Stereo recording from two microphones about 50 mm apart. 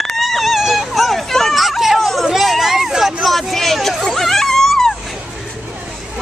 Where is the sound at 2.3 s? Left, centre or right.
Centre.